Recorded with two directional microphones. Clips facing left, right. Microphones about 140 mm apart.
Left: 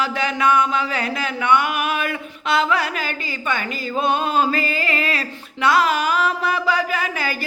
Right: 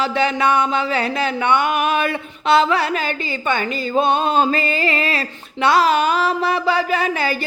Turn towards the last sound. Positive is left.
turn(degrees=-30)  # may be behind; listen again after turning